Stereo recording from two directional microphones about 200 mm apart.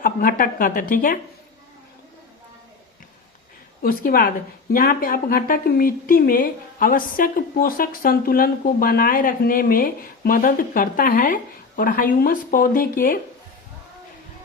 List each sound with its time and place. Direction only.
0.0 s a woman's voice: 45° left (ahead or behind)
3.8 s a woman's voice: 45° left (ahead or behind)